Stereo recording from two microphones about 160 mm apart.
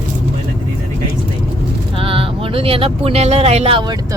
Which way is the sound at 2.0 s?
35° right (ahead or behind).